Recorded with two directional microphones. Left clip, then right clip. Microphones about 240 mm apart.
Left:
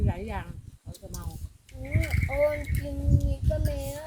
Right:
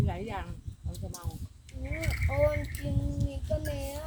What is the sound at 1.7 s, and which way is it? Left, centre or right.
Speech, centre.